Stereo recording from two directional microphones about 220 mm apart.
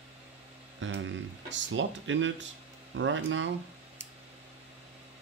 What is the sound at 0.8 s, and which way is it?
Speech, 60° right (ahead or behind).